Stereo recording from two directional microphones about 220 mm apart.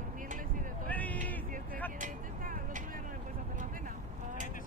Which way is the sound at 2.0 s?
35° right (ahead or behind).